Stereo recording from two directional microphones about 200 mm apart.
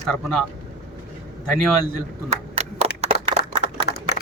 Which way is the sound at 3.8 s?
55° left (ahead or behind).